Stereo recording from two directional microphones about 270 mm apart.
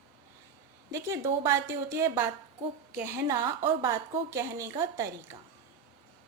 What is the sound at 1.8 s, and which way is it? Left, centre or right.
A woman's voice, centre.